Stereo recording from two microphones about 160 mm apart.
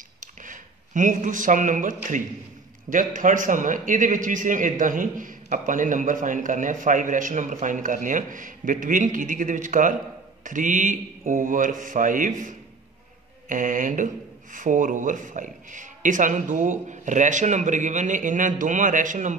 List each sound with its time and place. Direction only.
0.2 s a man's voice: 55° right (ahead or behind)